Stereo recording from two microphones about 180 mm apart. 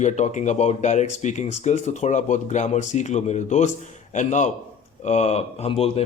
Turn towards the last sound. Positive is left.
turn(degrees=35)  # may be behind; listen again after turning